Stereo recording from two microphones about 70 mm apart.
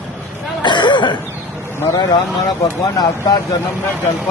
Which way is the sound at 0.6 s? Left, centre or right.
Left.